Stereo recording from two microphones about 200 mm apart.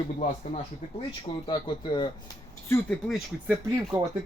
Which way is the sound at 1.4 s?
25° left (ahead or behind).